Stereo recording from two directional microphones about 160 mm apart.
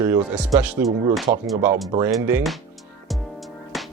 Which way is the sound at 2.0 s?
10° right (ahead or behind).